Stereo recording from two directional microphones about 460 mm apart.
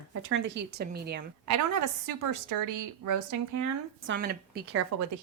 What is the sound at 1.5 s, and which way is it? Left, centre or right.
A woman's voice, right.